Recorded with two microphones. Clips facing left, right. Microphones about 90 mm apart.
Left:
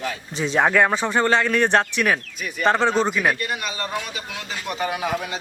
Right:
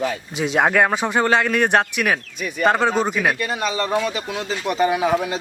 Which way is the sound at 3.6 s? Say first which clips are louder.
Right 7 dB; 35° right (ahead or behind).